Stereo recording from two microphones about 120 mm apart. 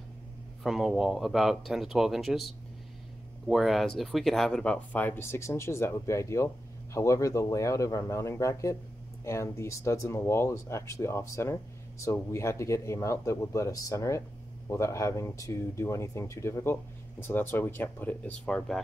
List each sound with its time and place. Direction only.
0.7 s speech: 5° right (ahead or behind)